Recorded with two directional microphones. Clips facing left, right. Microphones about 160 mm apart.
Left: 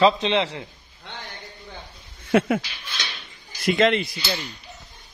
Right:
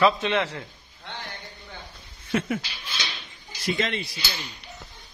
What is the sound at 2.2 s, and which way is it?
Speech, 70° left (ahead or behind).